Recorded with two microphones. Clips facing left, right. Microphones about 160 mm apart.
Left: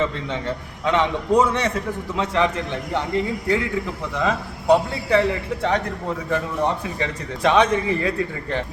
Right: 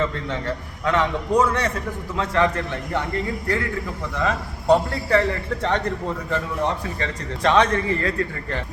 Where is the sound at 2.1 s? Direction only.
15° left (ahead or behind).